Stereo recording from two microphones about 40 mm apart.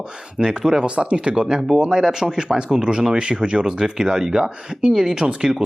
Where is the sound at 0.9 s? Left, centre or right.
Right.